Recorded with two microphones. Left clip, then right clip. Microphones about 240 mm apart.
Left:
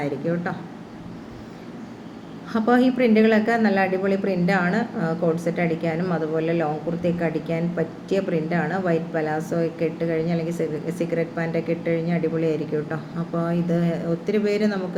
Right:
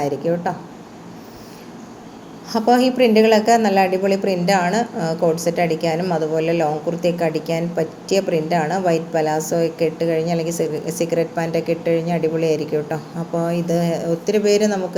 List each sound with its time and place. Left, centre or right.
0.0 s a woman's voice: right
2.5 s a woman's voice: centre